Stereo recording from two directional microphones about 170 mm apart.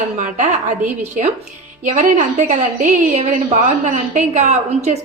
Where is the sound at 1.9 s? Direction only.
45° right (ahead or behind).